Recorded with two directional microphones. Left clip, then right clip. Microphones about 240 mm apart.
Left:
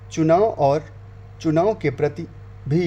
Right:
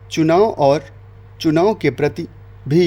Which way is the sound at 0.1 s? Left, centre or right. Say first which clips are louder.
Right 3 dB; right.